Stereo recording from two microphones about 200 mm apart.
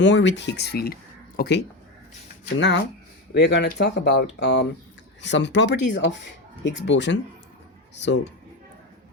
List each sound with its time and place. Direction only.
0.0 s speech: 60° left (ahead or behind)